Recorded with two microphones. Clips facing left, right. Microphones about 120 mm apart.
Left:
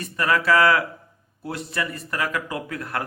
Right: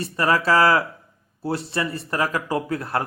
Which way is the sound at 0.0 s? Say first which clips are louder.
Right 2 dB; 30° right (ahead or behind).